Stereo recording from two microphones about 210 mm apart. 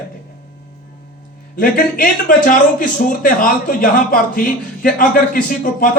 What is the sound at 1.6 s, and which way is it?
A man's voice, 40° left (ahead or behind).